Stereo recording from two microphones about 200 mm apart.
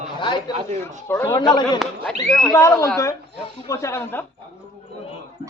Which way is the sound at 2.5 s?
15° left (ahead or behind).